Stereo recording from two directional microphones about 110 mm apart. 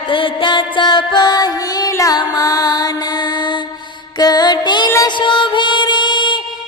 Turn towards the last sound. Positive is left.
turn(degrees=45)  # may be behind; listen again after turning